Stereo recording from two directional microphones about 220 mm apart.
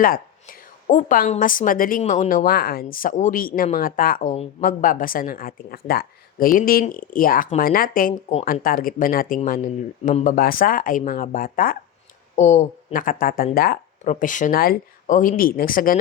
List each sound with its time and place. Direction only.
0.0 s a woman's voice: 40° left (ahead or behind)